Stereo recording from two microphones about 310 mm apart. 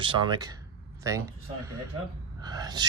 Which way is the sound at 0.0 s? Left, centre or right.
Centre.